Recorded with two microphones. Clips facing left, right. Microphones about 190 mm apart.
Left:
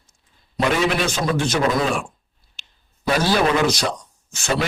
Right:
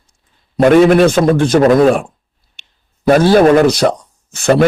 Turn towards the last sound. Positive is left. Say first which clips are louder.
# right 12 dB
turn(degrees=-60)  # may be behind; listen again after turning